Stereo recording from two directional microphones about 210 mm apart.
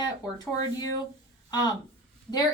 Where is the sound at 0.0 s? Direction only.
20° left (ahead or behind).